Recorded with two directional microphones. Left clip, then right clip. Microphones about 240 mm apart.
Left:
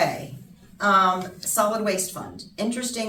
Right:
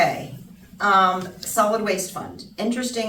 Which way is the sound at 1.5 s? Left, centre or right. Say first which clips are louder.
Right 3 dB; centre.